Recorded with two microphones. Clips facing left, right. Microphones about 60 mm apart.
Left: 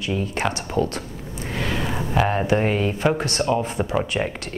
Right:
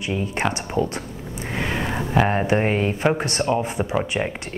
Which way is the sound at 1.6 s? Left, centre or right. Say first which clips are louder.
Right 1 dB; right.